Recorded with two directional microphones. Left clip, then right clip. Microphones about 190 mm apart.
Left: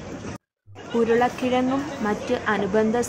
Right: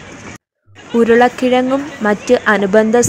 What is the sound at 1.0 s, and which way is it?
Speech, 35° right (ahead or behind).